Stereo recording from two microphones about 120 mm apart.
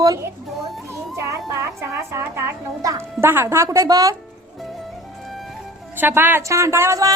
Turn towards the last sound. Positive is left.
turn(degrees=-25)  # may be behind; listen again after turning